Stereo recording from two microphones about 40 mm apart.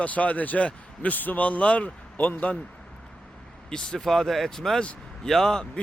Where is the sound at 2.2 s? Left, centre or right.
Left.